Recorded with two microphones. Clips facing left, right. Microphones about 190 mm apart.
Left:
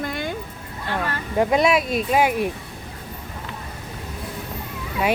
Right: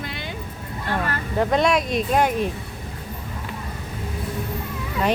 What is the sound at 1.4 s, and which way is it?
Speech, 10° left (ahead or behind).